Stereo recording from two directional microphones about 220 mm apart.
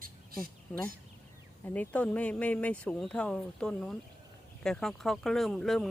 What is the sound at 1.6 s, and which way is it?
Speech, 5° left (ahead or behind).